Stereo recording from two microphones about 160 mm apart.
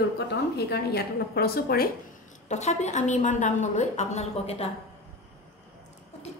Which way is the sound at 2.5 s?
45° left (ahead or behind).